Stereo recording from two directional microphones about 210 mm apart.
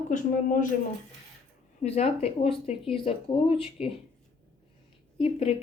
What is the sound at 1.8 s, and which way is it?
Speech, 30° left (ahead or behind).